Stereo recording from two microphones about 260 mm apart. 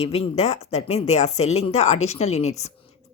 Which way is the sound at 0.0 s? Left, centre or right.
Left.